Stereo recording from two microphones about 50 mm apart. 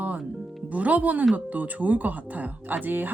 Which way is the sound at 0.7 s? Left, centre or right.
Right.